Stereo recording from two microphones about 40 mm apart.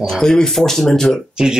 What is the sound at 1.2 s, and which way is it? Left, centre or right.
Speech, centre.